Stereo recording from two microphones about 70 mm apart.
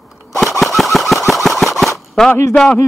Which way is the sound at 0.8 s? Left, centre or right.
Centre.